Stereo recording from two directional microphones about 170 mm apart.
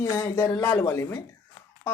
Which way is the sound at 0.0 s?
15° left (ahead or behind).